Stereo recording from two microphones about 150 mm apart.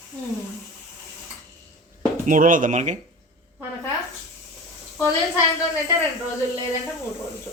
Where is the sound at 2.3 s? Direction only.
60° right (ahead or behind).